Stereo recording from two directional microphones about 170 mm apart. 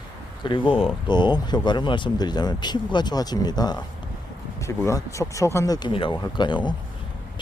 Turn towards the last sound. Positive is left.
turn(degrees=25)  # may be behind; listen again after turning